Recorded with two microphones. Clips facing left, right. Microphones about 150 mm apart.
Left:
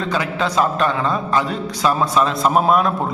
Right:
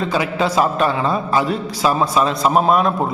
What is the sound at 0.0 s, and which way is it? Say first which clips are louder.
A man's voice: right 2 dB; 5° right (ahead or behind).